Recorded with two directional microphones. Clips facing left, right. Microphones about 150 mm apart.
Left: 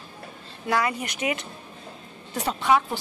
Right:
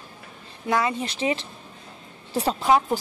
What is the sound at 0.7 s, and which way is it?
A woman's voice, 25° right (ahead or behind).